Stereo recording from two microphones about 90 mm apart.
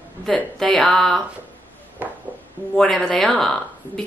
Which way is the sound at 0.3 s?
5° left (ahead or behind).